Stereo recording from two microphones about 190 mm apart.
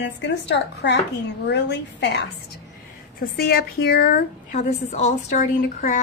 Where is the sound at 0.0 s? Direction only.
65° left (ahead or behind).